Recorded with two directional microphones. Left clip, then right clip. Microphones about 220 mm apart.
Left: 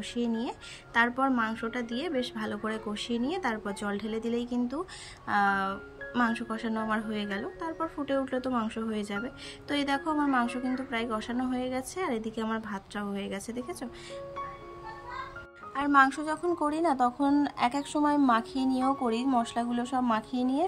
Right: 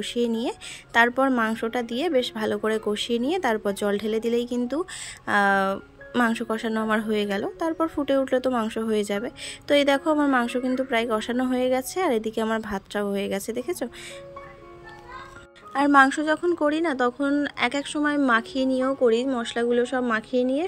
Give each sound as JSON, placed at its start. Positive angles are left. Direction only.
{"t": 0.0, "sound": "a woman's voice", "side_deg": -20}
{"t": 15.7, "sound": "a woman's voice", "side_deg": -20}